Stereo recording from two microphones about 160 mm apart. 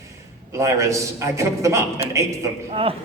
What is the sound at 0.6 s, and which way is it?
A man's voice, 20° right (ahead or behind).